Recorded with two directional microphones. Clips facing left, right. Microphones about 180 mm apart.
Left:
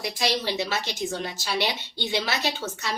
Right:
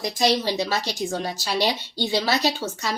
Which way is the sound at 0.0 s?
40° right (ahead or behind).